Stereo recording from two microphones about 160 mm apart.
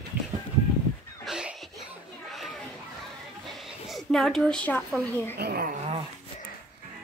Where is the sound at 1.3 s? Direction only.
5° right (ahead or behind).